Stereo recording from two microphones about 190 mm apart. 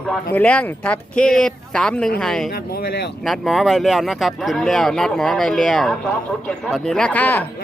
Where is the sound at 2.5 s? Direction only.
55° left (ahead or behind).